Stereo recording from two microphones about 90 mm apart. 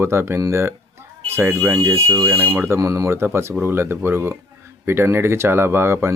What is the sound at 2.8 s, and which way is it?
Speech, 35° right (ahead or behind).